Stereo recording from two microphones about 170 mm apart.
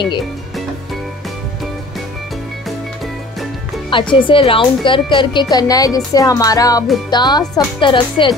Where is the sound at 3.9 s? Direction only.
30° left (ahead or behind).